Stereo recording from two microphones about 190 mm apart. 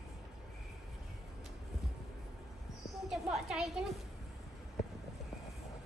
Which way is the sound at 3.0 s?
Centre (ahead or behind).